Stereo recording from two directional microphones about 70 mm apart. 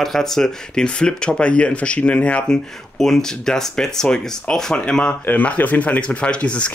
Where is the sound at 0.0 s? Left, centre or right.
Centre.